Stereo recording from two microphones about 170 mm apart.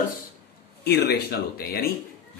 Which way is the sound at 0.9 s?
70° left (ahead or behind).